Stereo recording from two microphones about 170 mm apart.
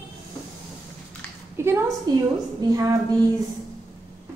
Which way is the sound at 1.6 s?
15° right (ahead or behind).